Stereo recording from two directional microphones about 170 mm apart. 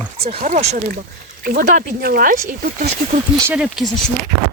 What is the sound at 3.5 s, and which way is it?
Speech, centre (ahead or behind).